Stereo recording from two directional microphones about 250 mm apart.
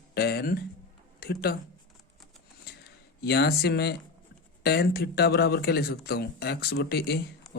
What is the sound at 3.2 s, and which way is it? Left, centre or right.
A man's voice, left.